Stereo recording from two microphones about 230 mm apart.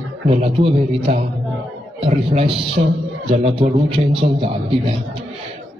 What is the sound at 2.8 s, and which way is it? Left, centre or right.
Speech, right.